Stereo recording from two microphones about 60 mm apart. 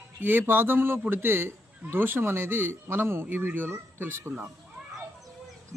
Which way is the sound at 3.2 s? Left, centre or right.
Right.